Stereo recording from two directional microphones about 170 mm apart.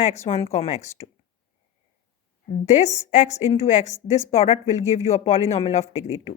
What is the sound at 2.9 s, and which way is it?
A woman's voice, 45° left (ahead or behind).